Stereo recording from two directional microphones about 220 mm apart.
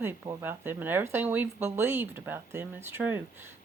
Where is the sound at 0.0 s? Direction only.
10° right (ahead or behind).